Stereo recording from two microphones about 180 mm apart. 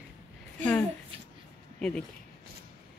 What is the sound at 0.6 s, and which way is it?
A woman's voice, 10° left (ahead or behind).